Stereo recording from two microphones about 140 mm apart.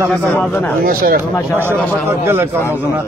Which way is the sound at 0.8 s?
90° right.